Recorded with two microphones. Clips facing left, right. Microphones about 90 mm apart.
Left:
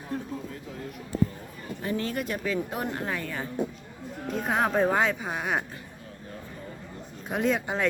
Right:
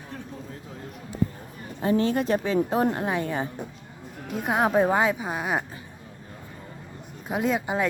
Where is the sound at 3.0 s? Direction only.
20° right (ahead or behind).